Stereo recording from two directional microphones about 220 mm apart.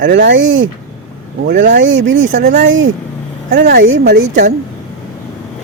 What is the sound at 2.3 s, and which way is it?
Speech, 35° right (ahead or behind).